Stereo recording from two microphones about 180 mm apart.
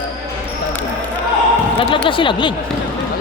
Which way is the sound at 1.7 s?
30° left (ahead or behind).